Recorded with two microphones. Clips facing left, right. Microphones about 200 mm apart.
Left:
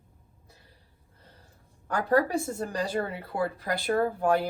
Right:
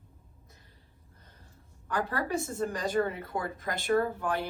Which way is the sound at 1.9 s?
45° left (ahead or behind).